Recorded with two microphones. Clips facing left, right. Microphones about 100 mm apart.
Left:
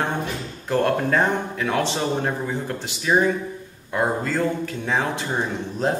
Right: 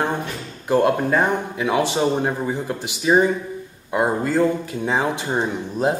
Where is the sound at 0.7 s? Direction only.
15° right (ahead or behind).